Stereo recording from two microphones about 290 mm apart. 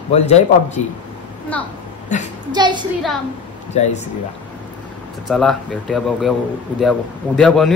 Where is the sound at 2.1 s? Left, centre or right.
Left.